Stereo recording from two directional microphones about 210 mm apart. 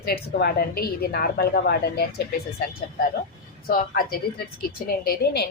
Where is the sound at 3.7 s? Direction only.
45° left (ahead or behind).